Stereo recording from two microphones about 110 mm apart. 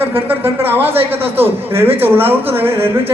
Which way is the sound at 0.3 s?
20° right (ahead or behind).